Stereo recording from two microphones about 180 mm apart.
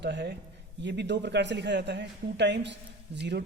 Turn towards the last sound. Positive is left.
turn(degrees=-70)  # may be behind; listen again after turning